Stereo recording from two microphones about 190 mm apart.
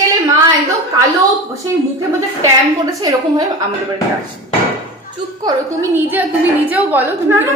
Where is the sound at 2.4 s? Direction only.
20° right (ahead or behind).